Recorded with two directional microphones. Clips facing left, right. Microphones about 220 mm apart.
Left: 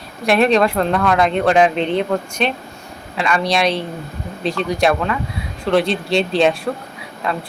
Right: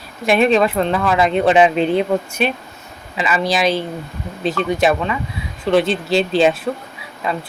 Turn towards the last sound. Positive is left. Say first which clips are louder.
# even
turn(degrees=0)  # may be behind; listen again after turning